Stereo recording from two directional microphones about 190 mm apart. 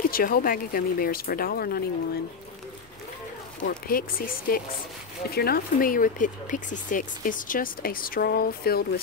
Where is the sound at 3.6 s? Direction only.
50° left (ahead or behind).